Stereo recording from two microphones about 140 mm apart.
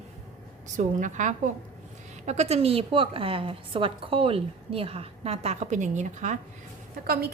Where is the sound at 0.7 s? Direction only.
60° right (ahead or behind).